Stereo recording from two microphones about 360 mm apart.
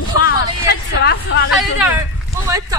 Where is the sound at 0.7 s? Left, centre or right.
Left.